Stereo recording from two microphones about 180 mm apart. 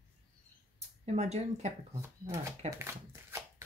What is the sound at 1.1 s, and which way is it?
Speech, 35° right (ahead or behind).